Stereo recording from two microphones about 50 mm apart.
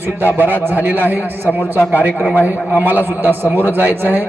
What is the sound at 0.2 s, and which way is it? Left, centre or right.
A man's voice, right.